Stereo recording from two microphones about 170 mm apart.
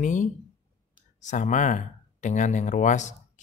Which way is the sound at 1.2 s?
45° left (ahead or behind).